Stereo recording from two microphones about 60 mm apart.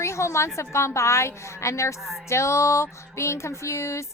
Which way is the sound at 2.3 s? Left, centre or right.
Left.